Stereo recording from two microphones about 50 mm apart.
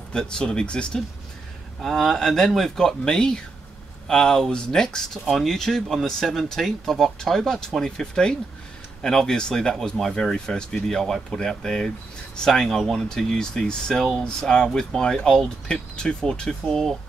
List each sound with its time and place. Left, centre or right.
0.1 s speech: centre
1.8 s speech: centre